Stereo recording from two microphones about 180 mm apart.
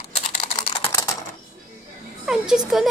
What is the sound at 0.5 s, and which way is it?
Typing, 25° left (ahead or behind).